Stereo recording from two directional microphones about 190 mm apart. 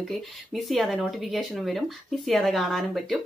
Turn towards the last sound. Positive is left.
turn(degrees=0)  # may be behind; listen again after turning